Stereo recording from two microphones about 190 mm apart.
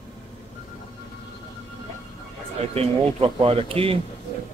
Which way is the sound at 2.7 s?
30° right (ahead or behind).